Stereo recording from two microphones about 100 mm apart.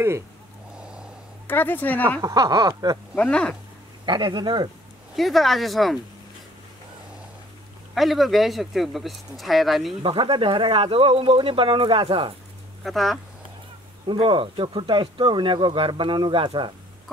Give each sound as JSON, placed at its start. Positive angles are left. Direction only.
{"t": 0.7, "sound": "snort", "side_deg": -10}
{"t": 1.5, "sound": "speech", "side_deg": 20}
{"t": 2.2, "sound": "speech", "side_deg": -35}
{"t": 3.2, "sound": "speech", "side_deg": 10}
{"t": 4.0, "sound": "speech", "side_deg": -50}
{"t": 5.1, "sound": "speech", "side_deg": 0}
{"t": 7.9, "sound": "speech", "side_deg": 0}
{"t": 10.0, "sound": "speech", "side_deg": -60}
{"t": 12.8, "sound": "speech", "side_deg": 0}
{"t": 14.0, "sound": "speech", "side_deg": -60}